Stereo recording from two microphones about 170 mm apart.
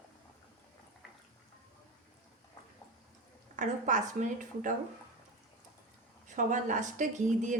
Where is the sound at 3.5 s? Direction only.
45° right (ahead or behind).